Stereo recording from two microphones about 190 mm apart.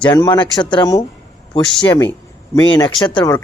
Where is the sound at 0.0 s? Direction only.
20° left (ahead or behind).